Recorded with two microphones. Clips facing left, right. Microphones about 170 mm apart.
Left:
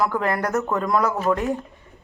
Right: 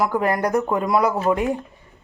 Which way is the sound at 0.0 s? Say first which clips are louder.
Right 2 dB; 10° right (ahead or behind).